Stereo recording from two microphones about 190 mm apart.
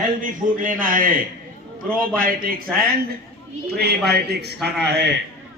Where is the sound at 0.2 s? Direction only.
45° right (ahead or behind); by 5.1 s 60° right (ahead or behind).